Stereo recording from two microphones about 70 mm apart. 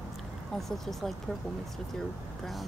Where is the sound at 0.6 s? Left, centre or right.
Centre.